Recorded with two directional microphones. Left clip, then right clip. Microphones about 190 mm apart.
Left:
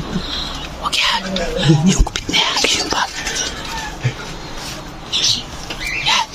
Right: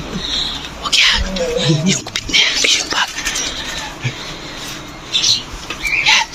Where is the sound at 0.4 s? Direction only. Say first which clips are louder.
Right 3 dB; 15° left (ahead or behind).